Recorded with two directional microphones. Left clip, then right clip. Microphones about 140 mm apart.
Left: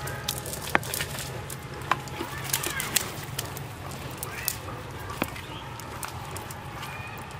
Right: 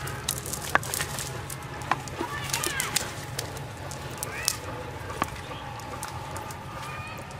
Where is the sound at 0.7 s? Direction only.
15° right (ahead or behind).